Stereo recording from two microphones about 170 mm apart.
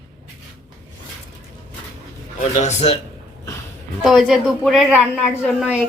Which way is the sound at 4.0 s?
Centre (ahead or behind).